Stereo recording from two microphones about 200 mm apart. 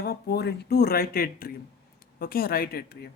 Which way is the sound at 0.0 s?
55° left (ahead or behind).